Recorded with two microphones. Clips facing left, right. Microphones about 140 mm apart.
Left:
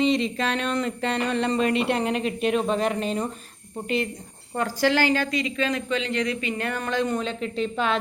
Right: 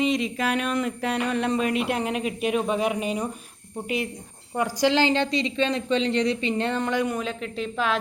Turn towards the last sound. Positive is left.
turn(degrees=0)  # may be behind; listen again after turning